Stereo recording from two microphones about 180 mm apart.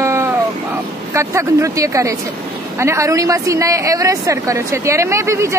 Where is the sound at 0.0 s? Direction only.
15° right (ahead or behind).